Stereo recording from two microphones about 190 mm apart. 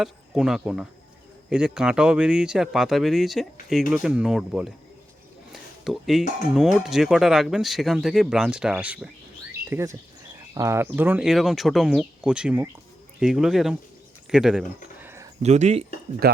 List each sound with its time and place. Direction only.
0.0 s speech: centre (ahead or behind)
5.5 s a sound: centre (ahead or behind)
6.5 s speech: centre (ahead or behind)
14.3 s a sound: 5° right (ahead or behind)
15.4 s speech: 35° right (ahead or behind)
16.2 s speech: 55° right (ahead or behind)